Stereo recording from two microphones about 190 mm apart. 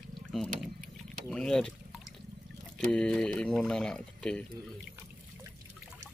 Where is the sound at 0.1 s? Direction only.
Centre (ahead or behind).